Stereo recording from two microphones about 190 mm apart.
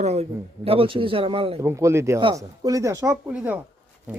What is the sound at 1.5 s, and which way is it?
A man's voice, 15° right (ahead or behind).